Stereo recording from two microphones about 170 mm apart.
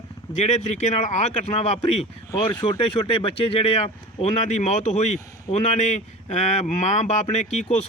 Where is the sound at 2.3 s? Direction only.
25° left (ahead or behind).